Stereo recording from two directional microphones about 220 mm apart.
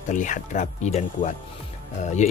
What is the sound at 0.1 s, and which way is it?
Speech, 35° left (ahead or behind).